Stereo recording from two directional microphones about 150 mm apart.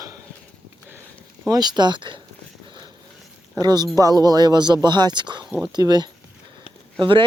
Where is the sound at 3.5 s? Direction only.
25° right (ahead or behind).